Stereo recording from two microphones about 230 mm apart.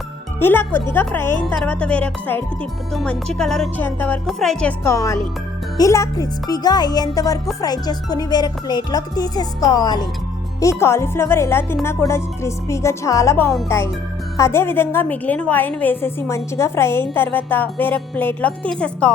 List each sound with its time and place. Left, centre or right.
0.3 s a woman's voice: centre
1.6 s music: centre
5.7 s a woman's voice: centre